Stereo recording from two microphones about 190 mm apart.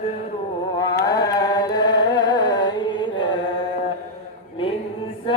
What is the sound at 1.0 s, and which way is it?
Chant, 20° left (ahead or behind).